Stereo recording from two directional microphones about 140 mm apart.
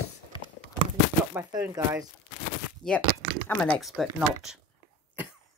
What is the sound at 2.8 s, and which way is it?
Speech, 30° left (ahead or behind).